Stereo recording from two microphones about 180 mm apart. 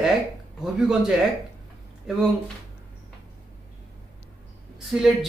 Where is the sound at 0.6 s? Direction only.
5° right (ahead or behind).